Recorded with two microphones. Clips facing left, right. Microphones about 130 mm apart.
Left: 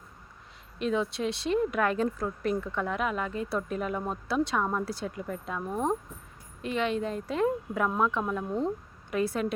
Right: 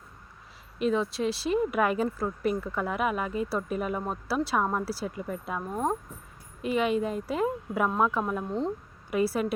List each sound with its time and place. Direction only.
0.8 s a woman's voice: centre (ahead or behind)